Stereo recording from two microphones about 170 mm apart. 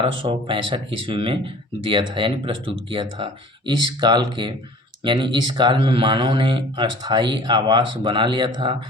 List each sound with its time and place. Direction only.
0.0 s speech: 30° right (ahead or behind)